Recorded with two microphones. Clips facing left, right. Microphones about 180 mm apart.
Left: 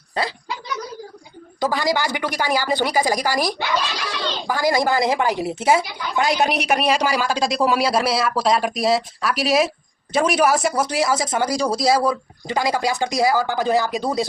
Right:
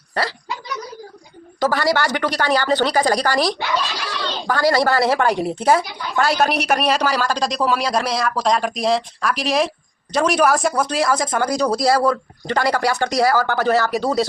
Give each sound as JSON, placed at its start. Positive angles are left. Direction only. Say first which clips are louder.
{"t": 0.1, "sound": "a woman's voice", "louder": "right 1 dB", "side_deg": 20}
{"t": 1.6, "sound": "a woman's voice", "louder": "right 2 dB", "side_deg": 15}